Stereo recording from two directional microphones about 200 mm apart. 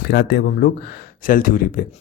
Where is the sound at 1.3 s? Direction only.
45° left (ahead or behind).